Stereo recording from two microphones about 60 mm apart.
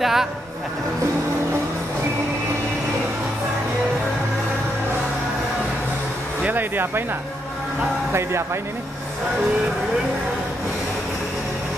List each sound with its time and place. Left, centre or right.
0.0 s speech: centre
6.4 s speech: right
8.1 s speech: right